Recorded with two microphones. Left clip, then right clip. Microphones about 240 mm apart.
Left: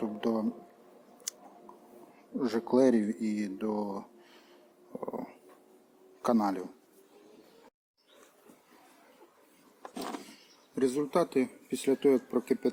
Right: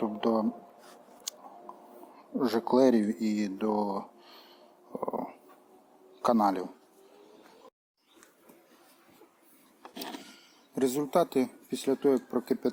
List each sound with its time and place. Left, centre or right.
0.0 s a sound: centre
1.3 s squish: centre
2.4 s a man's voice: centre
10.8 s speech: right
11.7 s speech: centre